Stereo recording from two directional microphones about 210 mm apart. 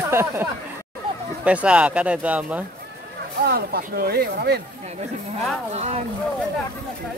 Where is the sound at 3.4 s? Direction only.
45° right (ahead or behind).